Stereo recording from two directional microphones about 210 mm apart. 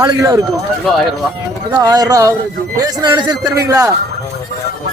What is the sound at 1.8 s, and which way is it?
A man's voice, 20° right (ahead or behind).